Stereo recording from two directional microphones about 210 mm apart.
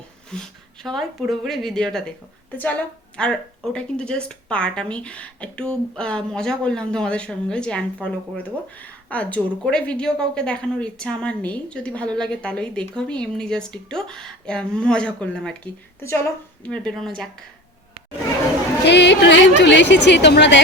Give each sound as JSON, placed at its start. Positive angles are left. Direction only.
{"t": 0.3, "sound": "speech", "side_deg": 5}
{"t": 18.9, "sound": "a woman's voice", "side_deg": 55}